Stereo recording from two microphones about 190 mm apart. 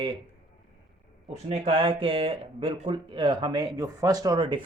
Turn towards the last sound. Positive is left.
turn(degrees=-25)  # may be behind; listen again after turning